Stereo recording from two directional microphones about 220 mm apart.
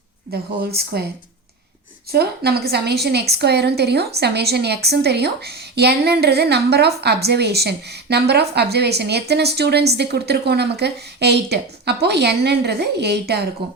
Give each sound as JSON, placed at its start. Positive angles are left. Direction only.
{"t": 0.9, "sound": "a woman's voice", "side_deg": -45}
{"t": 2.1, "sound": "a woman's voice", "side_deg": -45}